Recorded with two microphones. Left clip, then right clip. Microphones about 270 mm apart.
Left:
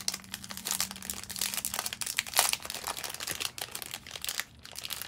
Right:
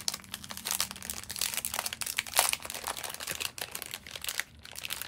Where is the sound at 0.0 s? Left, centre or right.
Centre.